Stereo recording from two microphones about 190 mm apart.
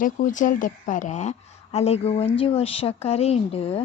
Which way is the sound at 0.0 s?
40° left (ahead or behind).